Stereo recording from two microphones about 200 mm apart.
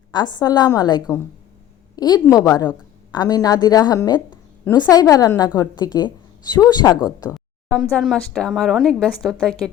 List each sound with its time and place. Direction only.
0.1 s a woman's voice: 20° left (ahead or behind)
7.7 s speech: 5° left (ahead or behind)